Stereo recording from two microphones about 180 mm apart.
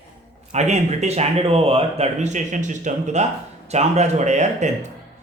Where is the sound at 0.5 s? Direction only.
40° right (ahead or behind).